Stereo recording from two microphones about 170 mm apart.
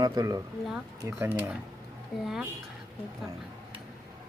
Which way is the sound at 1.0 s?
10° right (ahead or behind).